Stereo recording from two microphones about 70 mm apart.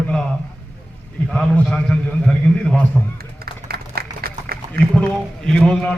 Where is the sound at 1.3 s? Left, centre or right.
Centre.